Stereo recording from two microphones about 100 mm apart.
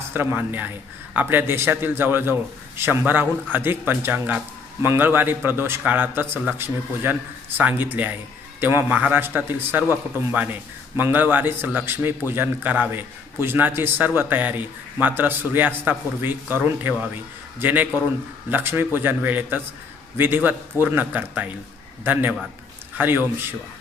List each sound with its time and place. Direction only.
0.1 s a man's voice: 20° right (ahead or behind)